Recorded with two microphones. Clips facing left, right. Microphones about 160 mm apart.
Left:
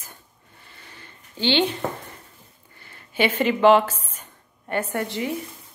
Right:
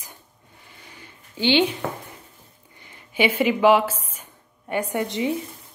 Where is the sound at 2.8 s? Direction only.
15° right (ahead or behind).